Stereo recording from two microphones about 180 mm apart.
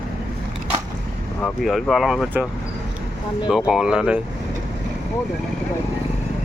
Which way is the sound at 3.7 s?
5° right (ahead or behind).